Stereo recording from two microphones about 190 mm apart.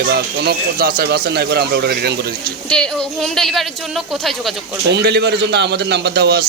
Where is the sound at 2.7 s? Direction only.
5° left (ahead or behind).